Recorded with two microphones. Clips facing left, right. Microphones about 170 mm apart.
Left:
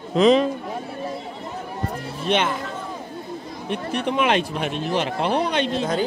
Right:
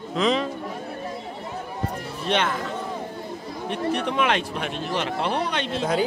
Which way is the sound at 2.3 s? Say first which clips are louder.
Left 2 dB; 10° left (ahead or behind).